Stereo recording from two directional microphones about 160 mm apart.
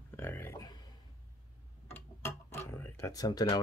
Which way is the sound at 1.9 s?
15° left (ahead or behind).